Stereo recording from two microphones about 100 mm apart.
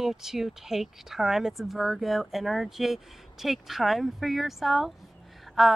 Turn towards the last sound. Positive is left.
turn(degrees=0)  # may be behind; listen again after turning